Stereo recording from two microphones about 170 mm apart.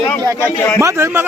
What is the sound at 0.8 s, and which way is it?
Speech, 15° right (ahead or behind).